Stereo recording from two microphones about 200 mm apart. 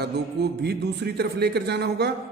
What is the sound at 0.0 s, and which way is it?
A man's voice, 55° right (ahead or behind).